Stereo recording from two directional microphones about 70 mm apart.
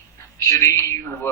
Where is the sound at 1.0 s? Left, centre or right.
Left.